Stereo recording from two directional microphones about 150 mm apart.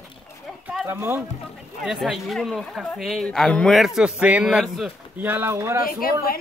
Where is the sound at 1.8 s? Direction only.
Centre (ahead or behind).